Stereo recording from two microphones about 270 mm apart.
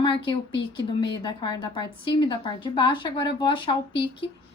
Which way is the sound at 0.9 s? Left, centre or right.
Centre.